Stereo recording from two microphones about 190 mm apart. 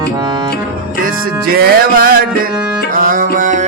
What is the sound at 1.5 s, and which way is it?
Music, 50° right (ahead or behind).